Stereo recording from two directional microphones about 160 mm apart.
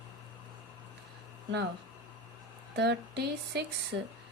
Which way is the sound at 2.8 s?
90° right.